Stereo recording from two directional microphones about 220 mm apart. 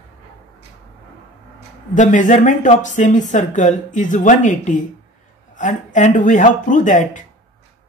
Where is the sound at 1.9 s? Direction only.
35° left (ahead or behind).